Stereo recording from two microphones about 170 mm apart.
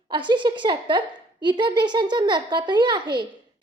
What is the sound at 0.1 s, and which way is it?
A woman's voice, 30° right (ahead or behind).